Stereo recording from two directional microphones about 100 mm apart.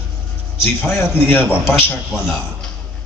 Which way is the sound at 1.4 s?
15° right (ahead or behind).